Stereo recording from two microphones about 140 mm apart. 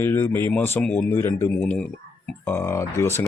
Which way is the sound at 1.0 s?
20° left (ahead or behind).